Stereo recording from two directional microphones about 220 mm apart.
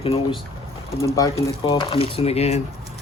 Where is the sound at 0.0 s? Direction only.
25° left (ahead or behind).